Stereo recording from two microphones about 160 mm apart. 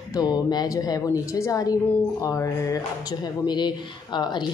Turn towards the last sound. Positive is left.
turn(degrees=25)  # may be behind; listen again after turning